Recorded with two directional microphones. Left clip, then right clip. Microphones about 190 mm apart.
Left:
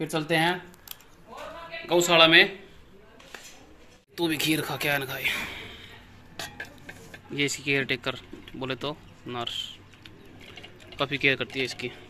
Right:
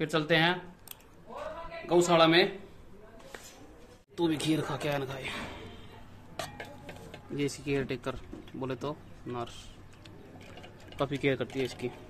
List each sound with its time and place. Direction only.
0.0 s speech: 20° left (ahead or behind)
1.9 s speech: centre (ahead or behind)
4.1 s speech: 5° right (ahead or behind)
7.3 s speech: centre (ahead or behind)
11.0 s speech: 5° right (ahead or behind)